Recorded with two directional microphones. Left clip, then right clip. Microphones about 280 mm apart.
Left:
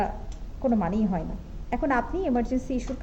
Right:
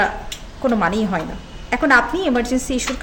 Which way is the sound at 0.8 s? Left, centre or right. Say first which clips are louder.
Right 9 dB; centre.